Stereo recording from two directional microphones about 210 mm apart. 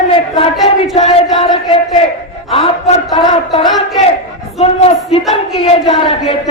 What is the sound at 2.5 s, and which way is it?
Speech, 30° left (ahead or behind).